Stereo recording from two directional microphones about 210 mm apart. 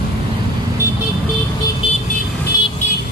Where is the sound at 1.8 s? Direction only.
25° left (ahead or behind).